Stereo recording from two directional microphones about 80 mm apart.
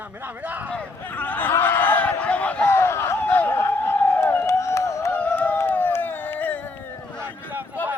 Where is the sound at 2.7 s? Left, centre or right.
Left.